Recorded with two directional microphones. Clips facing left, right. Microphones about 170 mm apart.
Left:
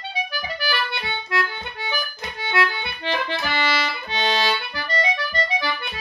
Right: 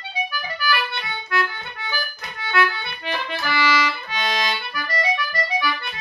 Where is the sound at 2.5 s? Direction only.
25° left (ahead or behind).